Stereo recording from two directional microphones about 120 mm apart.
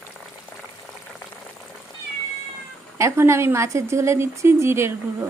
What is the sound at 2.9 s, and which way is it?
Speech, 25° right (ahead or behind).